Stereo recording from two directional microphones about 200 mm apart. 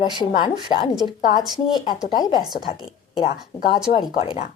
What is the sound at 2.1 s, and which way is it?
A woman's voice, 20° left (ahead or behind).